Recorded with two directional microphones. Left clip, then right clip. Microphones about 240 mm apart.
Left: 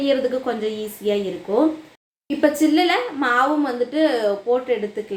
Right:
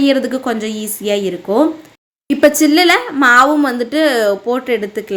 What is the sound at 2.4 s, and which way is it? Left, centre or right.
A woman's voice, right.